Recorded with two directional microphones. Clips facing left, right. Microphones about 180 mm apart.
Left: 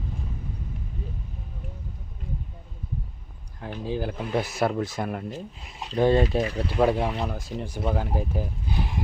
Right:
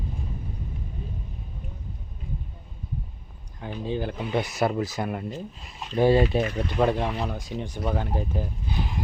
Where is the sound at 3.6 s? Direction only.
Centre (ahead or behind).